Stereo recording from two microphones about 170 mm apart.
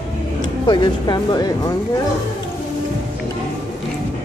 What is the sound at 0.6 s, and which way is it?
Speech, 25° left (ahead or behind).